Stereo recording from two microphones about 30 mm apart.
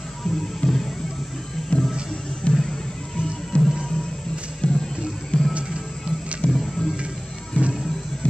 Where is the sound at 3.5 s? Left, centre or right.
Left.